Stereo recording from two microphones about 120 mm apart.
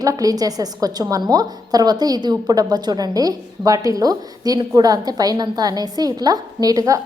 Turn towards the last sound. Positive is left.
turn(degrees=-30)  # may be behind; listen again after turning